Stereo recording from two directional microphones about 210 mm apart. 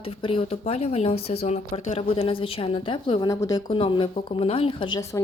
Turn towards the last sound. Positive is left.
turn(degrees=20)  # may be behind; listen again after turning